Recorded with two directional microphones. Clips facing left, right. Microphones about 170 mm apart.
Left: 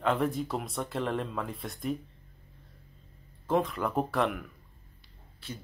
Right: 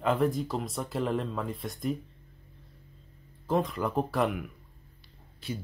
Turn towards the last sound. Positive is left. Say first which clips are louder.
# right 6 dB
turn(degrees=-15)  # may be behind; listen again after turning